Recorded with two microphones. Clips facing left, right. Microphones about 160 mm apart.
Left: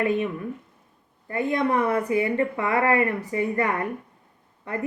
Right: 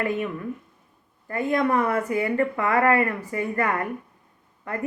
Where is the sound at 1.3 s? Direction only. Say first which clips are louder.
Right 1 dB; 20° left (ahead or behind).